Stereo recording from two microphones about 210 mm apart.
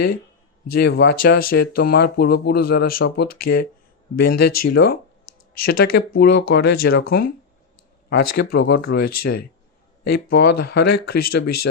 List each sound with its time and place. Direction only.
0.7 s speech: 50° left (ahead or behind)